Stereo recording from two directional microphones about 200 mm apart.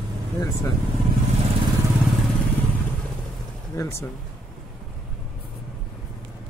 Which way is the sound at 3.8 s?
15° left (ahead or behind).